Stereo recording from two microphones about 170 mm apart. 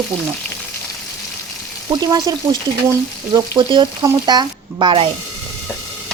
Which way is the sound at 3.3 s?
25° right (ahead or behind).